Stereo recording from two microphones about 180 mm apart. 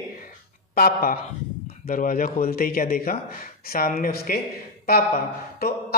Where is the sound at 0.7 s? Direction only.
55° left (ahead or behind).